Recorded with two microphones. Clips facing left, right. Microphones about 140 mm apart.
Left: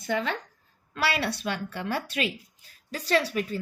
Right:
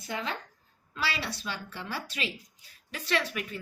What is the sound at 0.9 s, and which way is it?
A woman's voice, 60° left (ahead or behind).